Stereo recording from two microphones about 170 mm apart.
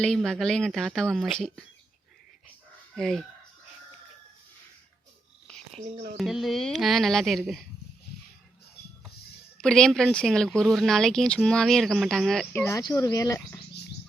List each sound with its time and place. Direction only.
0.0 s speech: centre (ahead or behind)
2.9 s speech: centre (ahead or behind)
6.1 s speech: centre (ahead or behind)
9.6 s speech: 5° left (ahead or behind)
12.5 s speech: 20° left (ahead or behind)